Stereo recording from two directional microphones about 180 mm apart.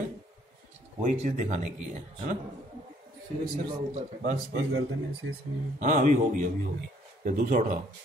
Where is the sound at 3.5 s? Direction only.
45° right (ahead or behind).